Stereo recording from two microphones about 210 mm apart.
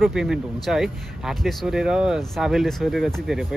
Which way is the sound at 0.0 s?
Centre (ahead or behind).